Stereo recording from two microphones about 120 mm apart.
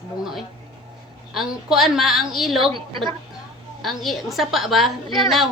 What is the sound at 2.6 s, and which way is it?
Speech, 45° right (ahead or behind).